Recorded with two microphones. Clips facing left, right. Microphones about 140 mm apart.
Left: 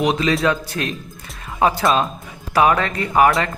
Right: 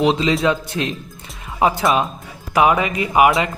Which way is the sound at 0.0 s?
20° right (ahead or behind).